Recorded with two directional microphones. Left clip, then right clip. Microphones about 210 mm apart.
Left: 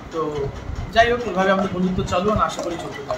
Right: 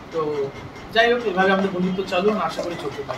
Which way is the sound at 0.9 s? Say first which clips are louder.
Left 1 dB; centre (ahead or behind).